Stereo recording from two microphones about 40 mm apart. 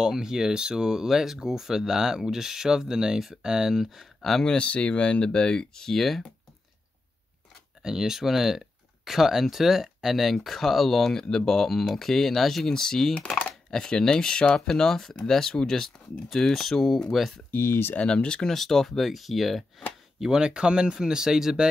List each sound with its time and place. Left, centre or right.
0.0 s speech: centre
3.8 s speech: centre
4.6 s speech: left
5.9 s speech: centre
7.8 s speech: centre
17.6 s speech: left
18.0 s speech: left
18.5 s speech: centre
20.2 s speech: centre